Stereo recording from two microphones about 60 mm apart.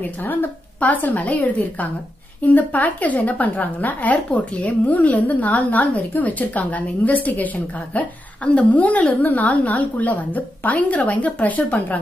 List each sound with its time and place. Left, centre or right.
0.0 s a woman's voice: left